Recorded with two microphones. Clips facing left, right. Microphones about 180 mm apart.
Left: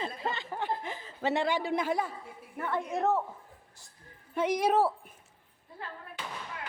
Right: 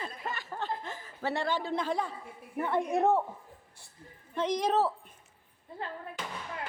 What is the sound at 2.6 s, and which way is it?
Speech, 20° right (ahead or behind).